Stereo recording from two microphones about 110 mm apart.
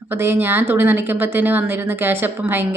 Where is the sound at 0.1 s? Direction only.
20° right (ahead or behind).